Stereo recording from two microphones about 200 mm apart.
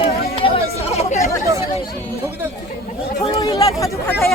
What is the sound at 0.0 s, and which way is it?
Run, 30° left (ahead or behind).